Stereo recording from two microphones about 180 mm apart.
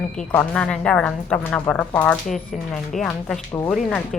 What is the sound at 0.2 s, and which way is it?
A woman's voice, 5° left (ahead or behind).